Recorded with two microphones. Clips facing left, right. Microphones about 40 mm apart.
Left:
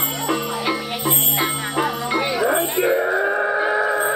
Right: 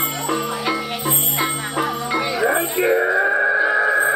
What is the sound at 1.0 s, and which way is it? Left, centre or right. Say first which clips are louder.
Music: left 3 dB; left.